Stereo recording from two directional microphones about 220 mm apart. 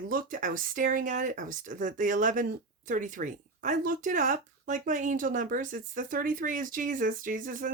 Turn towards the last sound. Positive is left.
turn(degrees=-40)  # may be behind; listen again after turning